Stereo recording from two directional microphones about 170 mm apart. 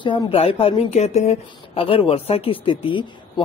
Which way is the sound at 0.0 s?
30° left (ahead or behind).